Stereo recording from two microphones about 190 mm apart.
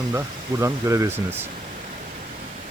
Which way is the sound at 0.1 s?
15° right (ahead or behind).